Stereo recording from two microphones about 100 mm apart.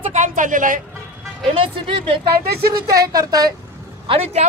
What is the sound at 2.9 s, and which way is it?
Speech, 40° right (ahead or behind).